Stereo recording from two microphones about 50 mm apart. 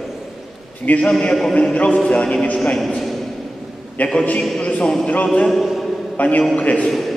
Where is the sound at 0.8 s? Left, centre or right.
Left.